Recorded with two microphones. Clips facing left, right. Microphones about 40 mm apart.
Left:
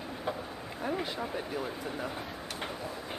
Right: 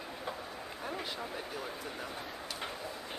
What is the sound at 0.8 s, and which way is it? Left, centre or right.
Speech, centre.